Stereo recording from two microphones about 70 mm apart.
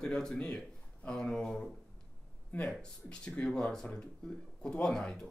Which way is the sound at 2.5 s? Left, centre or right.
Left.